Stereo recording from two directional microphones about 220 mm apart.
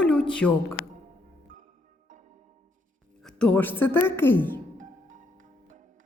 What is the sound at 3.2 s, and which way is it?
A woman's voice, 5° left (ahead or behind).